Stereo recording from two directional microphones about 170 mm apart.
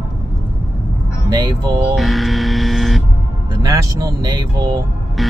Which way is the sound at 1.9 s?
Centre (ahead or behind).